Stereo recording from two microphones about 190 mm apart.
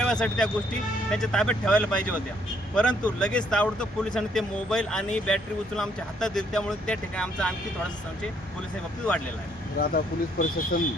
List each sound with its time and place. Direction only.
0.0 s speech: 5° left (ahead or behind)
9.7 s speech: 50° left (ahead or behind)